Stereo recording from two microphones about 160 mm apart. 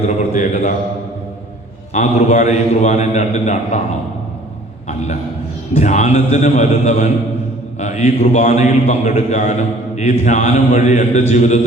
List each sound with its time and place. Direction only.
0.1 s mantra: 45° left (ahead or behind)
1.9 s a man's voice: 45° left (ahead or behind)
4.9 s a man's voice: 45° left (ahead or behind)